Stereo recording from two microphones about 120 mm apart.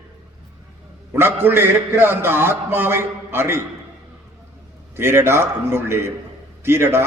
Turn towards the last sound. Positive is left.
turn(degrees=-20)  # may be behind; listen again after turning